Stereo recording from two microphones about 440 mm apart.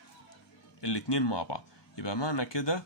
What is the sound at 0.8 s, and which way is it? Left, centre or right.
Speech, left.